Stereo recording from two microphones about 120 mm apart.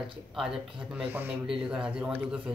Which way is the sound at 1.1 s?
15° right (ahead or behind).